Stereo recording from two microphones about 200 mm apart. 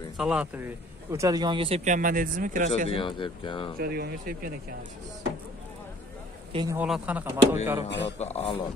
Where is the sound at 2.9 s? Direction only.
25° left (ahead or behind).